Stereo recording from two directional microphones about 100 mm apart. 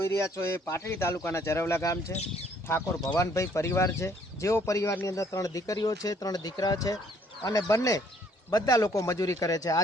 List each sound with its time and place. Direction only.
0.0 s a man's voice: 30° left (ahead or behind)